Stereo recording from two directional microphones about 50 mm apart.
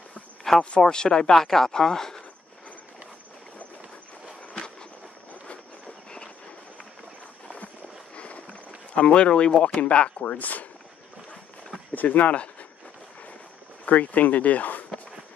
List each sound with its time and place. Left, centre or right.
0.4 s a sound: centre
0.7 s speech: centre
8.9 s speech: left
11.9 s speech: left
13.8 s speech: left